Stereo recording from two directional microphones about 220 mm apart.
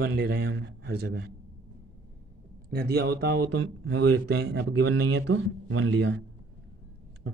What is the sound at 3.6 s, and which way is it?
Speech, 70° right (ahead or behind).